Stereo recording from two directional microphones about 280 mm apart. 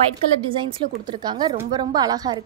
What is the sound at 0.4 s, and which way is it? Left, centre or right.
A woman's voice, centre.